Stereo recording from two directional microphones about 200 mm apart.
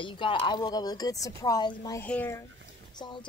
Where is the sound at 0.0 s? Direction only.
25° left (ahead or behind).